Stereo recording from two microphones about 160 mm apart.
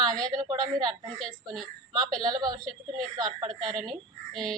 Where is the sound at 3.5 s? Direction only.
Centre (ahead or behind).